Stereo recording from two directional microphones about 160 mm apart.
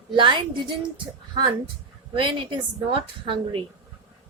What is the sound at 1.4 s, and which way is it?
Music, 25° right (ahead or behind).